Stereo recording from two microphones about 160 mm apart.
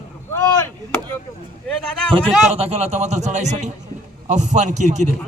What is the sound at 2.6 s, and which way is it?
A man's voice, 40° right (ahead or behind).